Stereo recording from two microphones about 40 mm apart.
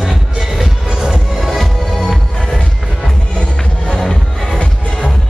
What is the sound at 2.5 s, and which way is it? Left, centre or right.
Music, left.